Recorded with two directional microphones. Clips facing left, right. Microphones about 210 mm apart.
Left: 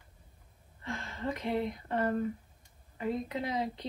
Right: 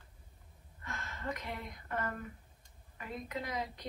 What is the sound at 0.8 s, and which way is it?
Speech, 30° left (ahead or behind).